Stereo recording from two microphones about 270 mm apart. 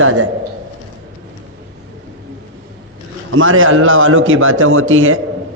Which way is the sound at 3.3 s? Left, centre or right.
Right.